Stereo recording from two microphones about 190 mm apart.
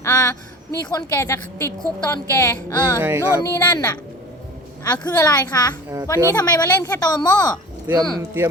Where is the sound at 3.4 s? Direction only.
15° left (ahead or behind).